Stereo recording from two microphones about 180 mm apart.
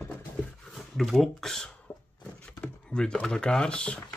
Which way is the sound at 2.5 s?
5° left (ahead or behind).